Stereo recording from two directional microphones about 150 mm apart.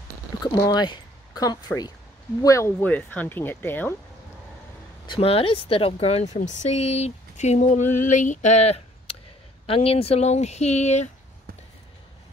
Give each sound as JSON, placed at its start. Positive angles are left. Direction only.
{"t": 0.6, "sound": "speech", "side_deg": 25}
{"t": 5.0, "sound": "speech", "side_deg": 35}